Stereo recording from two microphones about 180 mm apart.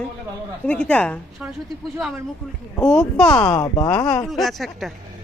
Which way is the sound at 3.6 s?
20° left (ahead or behind).